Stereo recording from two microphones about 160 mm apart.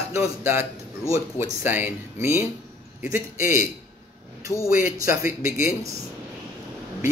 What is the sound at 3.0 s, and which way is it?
Speech, 60° left (ahead or behind).